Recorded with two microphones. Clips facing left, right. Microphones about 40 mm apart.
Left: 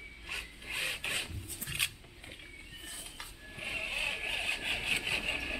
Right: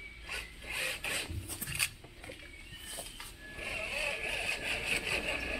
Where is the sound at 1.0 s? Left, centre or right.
Centre.